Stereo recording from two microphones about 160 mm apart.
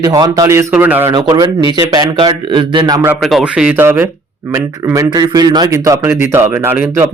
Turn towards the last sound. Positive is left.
turn(degrees=-15)  # may be behind; listen again after turning